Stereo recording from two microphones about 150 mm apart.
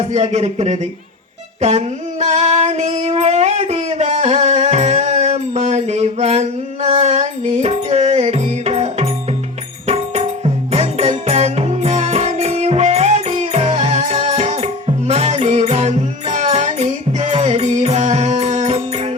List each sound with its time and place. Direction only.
0.1 s speech: 50° right (ahead or behind)
1.6 s a sound: 50° right (ahead or behind)
9.8 s music: 45° right (ahead or behind)